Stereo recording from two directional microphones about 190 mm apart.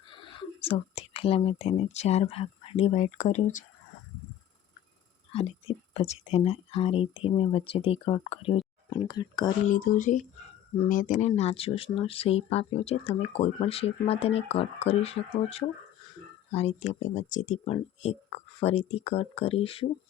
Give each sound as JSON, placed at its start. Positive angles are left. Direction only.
{"t": 0.1, "sound": "speech", "side_deg": 25}
{"t": 5.3, "sound": "speech", "side_deg": 30}
{"t": 9.6, "sound": "speech", "side_deg": 45}